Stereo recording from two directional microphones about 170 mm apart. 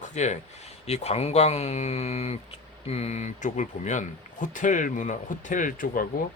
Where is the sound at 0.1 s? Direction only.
45° left (ahead or behind).